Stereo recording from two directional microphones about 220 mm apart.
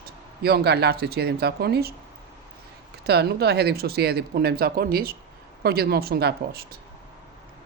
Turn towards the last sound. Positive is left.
turn(degrees=-45)  # may be behind; listen again after turning